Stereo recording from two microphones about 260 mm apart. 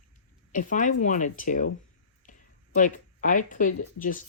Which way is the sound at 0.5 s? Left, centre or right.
Left.